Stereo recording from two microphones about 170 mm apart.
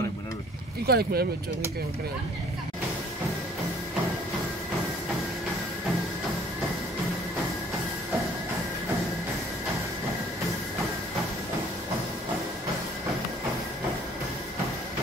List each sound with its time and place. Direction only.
0.8 s speech: 65° right (ahead or behind)